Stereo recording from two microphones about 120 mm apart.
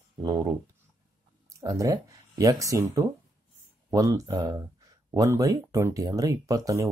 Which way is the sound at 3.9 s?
30° right (ahead or behind).